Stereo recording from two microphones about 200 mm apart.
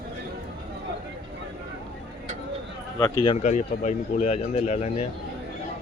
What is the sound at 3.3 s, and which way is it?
Speech, 35° left (ahead or behind).